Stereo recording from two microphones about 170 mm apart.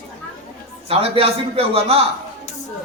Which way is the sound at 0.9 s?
35° right (ahead or behind).